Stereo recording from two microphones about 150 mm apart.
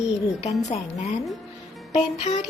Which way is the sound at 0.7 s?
45° left (ahead or behind).